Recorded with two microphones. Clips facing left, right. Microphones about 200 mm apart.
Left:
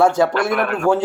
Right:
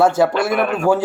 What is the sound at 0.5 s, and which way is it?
Speech, 15° right (ahead or behind).